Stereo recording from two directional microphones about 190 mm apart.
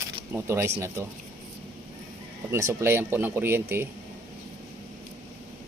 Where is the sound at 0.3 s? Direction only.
15° right (ahead or behind).